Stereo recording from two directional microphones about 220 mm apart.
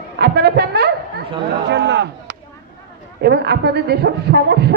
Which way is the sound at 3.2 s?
50° right (ahead or behind).